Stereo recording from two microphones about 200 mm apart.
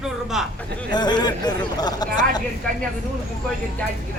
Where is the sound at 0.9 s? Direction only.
20° left (ahead or behind).